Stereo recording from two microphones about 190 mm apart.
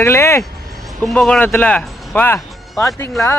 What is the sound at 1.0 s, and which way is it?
Speech, 5° left (ahead or behind).